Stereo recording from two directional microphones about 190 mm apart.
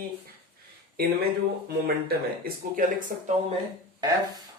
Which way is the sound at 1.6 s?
55° right (ahead or behind).